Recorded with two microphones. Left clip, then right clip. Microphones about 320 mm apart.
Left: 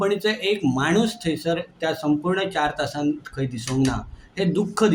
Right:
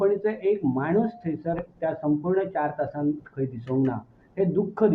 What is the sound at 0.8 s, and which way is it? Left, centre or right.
Speech, right.